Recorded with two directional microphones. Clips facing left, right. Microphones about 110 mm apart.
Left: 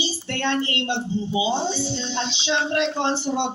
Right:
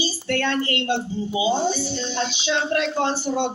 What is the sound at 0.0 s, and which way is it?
Speech, 20° left (ahead or behind).